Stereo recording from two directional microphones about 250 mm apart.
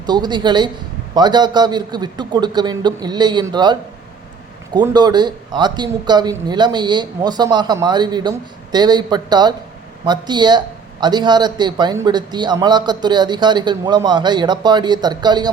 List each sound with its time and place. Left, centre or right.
0.0 s speech: centre